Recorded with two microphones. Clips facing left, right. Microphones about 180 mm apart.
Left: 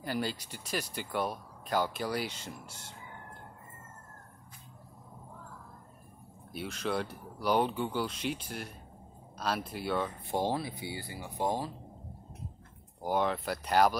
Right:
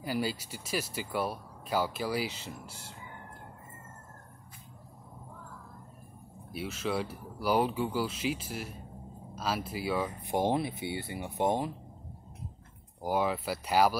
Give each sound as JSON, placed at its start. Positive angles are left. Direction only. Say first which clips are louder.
{"t": 0.0, "sound": "speech", "louder": "right 2 dB", "side_deg": -5}
{"t": 6.5, "sound": "speech", "louder": "right 1 dB", "side_deg": -5}
{"t": 10.2, "sound": "speech", "louder": "right 3 dB", "side_deg": -20}
{"t": 13.0, "sound": "speech", "louder": "right 1 dB", "side_deg": -5}